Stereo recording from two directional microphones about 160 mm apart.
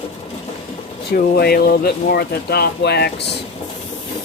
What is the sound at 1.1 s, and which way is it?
Speech, 80° left.